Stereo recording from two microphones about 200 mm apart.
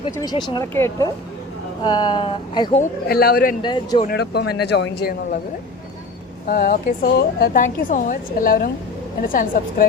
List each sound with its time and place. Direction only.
0.0 s speech: 20° left (ahead or behind)
3.1 s speech: 50° left (ahead or behind)
3.6 s speech: 20° left (ahead or behind)
4.0 s speech: 55° left (ahead or behind)
6.5 s speech: 45° left (ahead or behind)